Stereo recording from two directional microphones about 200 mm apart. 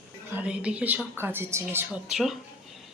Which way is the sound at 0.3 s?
5° right (ahead or behind).